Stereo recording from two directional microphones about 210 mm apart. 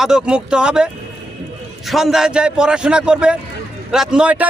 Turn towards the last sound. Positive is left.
turn(degrees=-5)  # may be behind; listen again after turning